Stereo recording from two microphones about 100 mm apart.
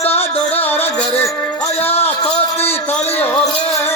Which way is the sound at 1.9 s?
90° left.